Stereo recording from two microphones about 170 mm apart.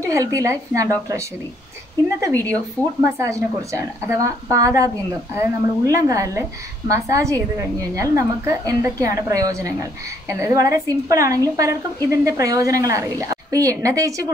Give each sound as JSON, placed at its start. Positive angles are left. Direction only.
{"t": 0.0, "sound": "a woman's voice", "side_deg": -20}
{"t": 2.1, "sound": "a woman's voice", "side_deg": -20}